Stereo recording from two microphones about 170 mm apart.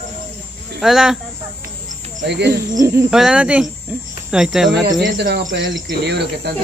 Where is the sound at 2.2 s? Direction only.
90° right.